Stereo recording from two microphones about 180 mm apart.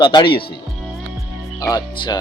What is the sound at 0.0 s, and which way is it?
Speech, 25° left (ahead or behind).